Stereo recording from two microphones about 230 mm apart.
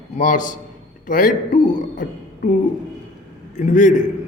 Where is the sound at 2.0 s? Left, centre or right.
Left.